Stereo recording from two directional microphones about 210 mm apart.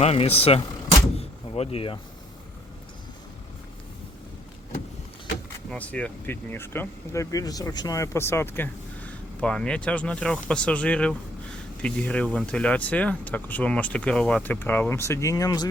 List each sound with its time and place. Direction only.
0.0 s vehicle: 30° left (ahead or behind)
5.7 s speech: 5° left (ahead or behind)